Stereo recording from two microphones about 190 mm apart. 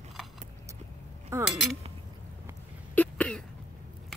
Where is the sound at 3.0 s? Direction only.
5° left (ahead or behind).